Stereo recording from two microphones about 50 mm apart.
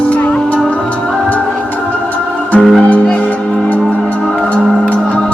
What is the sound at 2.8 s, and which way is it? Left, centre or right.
Music, left.